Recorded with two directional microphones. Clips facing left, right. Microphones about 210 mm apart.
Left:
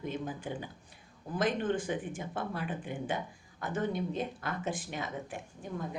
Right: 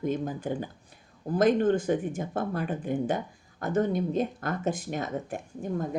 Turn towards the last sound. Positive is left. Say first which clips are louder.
# right 8 dB
turn(degrees=-45)  # may be behind; listen again after turning